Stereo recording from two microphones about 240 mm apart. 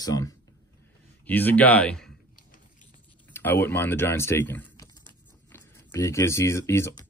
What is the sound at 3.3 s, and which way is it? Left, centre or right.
Speech, centre.